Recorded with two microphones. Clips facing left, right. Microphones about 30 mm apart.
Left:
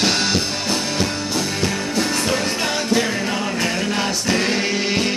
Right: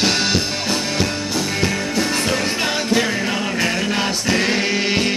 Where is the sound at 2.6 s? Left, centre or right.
Centre.